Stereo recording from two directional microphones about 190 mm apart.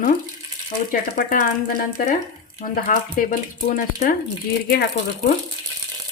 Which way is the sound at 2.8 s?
45° left (ahead or behind).